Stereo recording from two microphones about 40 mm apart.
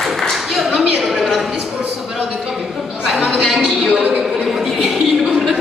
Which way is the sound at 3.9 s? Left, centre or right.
Right.